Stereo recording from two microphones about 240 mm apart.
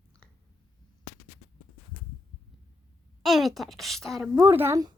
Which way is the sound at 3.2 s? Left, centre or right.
Centre.